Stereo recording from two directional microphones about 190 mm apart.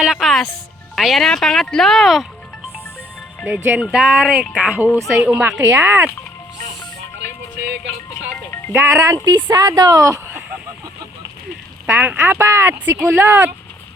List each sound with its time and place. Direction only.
0.0 s speech: centre (ahead or behind)
3.4 s speech: 5° right (ahead or behind)
8.7 s speech: 15° right (ahead or behind)
11.9 s speech: 10° right (ahead or behind)